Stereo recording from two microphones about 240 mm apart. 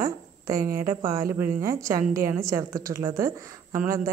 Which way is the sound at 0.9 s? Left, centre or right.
Centre.